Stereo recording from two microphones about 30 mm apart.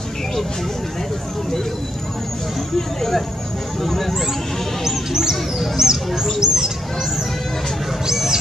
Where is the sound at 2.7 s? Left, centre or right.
Centre.